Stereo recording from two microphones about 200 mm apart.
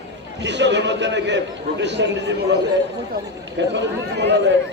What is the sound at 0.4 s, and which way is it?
A man's voice, 60° right (ahead or behind).